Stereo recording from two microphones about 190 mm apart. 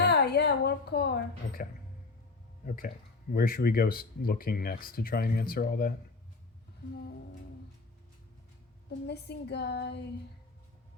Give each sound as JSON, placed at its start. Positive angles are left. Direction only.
{"t": 0.0, "sound": "a woman's voice", "side_deg": 60}
{"t": 2.6, "sound": "speech", "side_deg": 45}
{"t": 9.0, "sound": "speech", "side_deg": 60}